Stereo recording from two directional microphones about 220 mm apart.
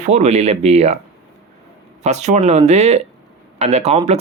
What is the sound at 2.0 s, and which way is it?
Speech, 30° right (ahead or behind).